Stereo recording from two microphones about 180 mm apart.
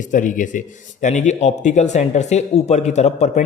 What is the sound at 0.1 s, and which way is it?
Speech, 45° left (ahead or behind).